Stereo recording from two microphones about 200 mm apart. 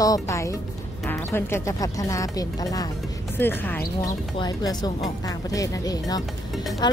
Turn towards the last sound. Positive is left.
turn(degrees=20)  # may be behind; listen again after turning